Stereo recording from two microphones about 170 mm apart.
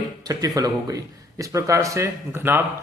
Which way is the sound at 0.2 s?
20° right (ahead or behind).